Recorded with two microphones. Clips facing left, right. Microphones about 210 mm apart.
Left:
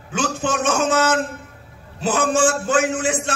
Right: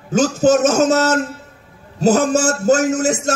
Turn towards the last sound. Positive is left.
turn(degrees=-40)  # may be behind; listen again after turning